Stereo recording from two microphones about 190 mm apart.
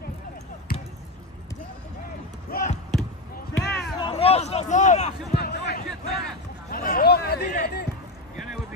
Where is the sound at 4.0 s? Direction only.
30° left (ahead or behind).